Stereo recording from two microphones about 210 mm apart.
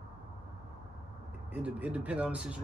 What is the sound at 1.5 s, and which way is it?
Speech, 5° right (ahead or behind).